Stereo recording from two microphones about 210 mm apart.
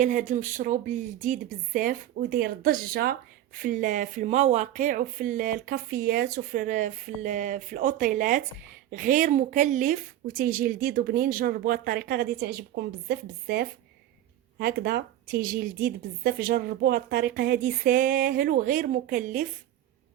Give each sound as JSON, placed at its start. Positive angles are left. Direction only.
{"t": 0.0, "sound": "a woman's voice", "side_deg": -35}